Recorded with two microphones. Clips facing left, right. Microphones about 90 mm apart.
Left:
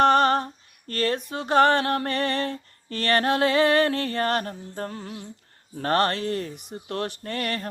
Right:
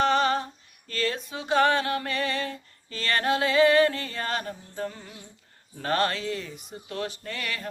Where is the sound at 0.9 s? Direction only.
55° left (ahead or behind).